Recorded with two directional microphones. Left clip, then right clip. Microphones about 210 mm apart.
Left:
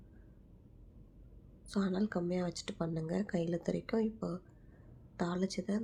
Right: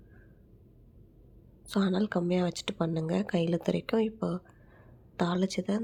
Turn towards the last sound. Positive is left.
turn(degrees=-30)  # may be behind; listen again after turning